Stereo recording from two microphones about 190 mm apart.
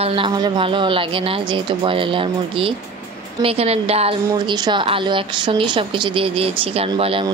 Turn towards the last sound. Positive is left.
turn(degrees=-25)  # may be behind; listen again after turning